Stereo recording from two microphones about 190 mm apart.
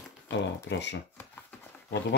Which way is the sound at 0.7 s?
65° left (ahead or behind).